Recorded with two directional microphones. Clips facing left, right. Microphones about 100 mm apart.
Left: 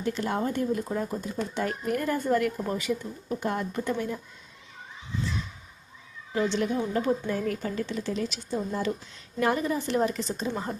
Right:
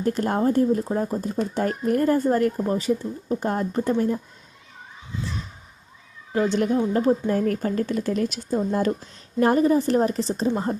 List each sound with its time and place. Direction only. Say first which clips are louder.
0.0 s speech: right 6 dB; 45° right (ahead or behind)
6.3 s a woman's voice: right 5 dB; 40° right (ahead or behind)